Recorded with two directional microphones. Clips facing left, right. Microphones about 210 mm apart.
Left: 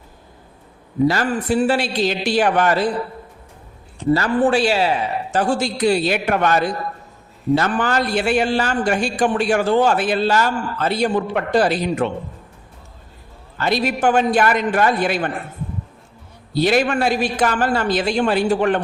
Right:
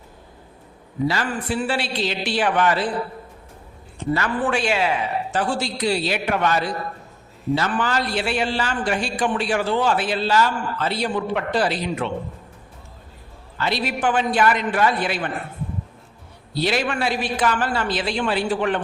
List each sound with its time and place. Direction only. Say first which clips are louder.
1.0 s a man's voice: left 5 dB; 45° left (ahead or behind)
4.1 s a man's voice: left 6 dB; 35° left (ahead or behind)
13.6 s a man's voice: left 4 dB; 45° left (ahead or behind)
16.6 s a man's voice: left 5 dB; 45° left (ahead or behind)